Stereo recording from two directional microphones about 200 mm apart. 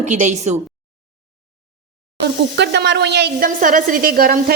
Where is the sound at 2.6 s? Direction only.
60° right (ahead or behind).